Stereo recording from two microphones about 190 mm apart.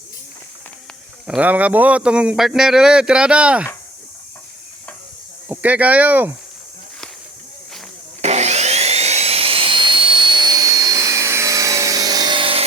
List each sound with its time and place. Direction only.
1.3 s speech: 10° right (ahead or behind)
5.5 s speech: 10° right (ahead or behind)
8.2 s a sound: 35° right (ahead or behind)